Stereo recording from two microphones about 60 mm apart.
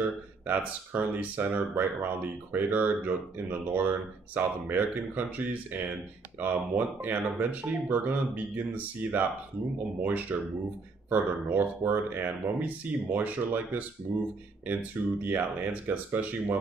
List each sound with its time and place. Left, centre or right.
0.5 s speech: right
10.3 s speech: right